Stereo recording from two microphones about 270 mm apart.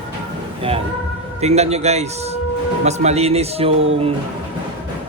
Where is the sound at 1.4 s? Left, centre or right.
Right.